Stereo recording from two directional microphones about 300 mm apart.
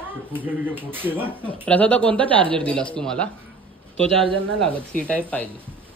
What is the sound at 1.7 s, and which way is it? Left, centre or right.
A man's voice, centre.